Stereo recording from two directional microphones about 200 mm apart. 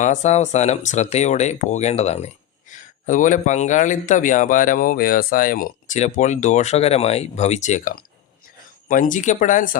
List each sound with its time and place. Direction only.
0.0 s speech: 35° left (ahead or behind)